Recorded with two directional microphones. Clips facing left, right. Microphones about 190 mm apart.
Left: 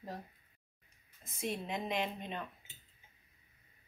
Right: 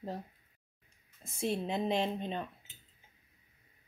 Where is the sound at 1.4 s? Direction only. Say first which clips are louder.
Right 5 dB; 30° right (ahead or behind).